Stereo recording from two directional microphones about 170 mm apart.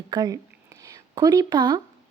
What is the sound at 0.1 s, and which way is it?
A woman's voice, 25° right (ahead or behind).